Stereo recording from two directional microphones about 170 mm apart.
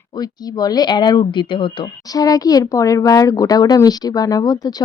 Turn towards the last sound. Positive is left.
turn(degrees=20)  # may be behind; listen again after turning